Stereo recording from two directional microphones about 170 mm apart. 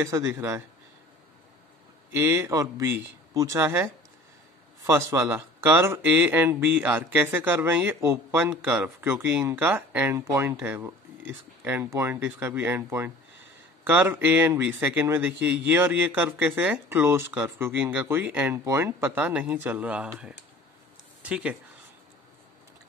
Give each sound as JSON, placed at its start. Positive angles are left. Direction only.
{"t": 0.0, "sound": "speech", "side_deg": -15}
{"t": 2.1, "sound": "speech", "side_deg": -15}